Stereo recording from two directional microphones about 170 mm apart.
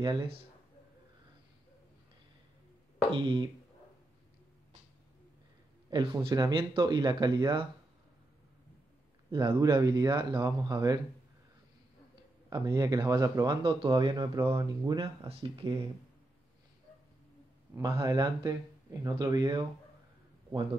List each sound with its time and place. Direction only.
0.0 s speech: 25° right (ahead or behind)
3.2 s speech: 30° right (ahead or behind)
5.9 s speech: 25° right (ahead or behind)
9.3 s speech: 25° right (ahead or behind)
12.4 s speech: 25° right (ahead or behind)
17.8 s speech: 25° right (ahead or behind)